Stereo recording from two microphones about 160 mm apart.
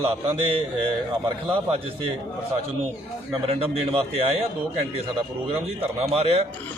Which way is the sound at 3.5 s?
35° right (ahead or behind).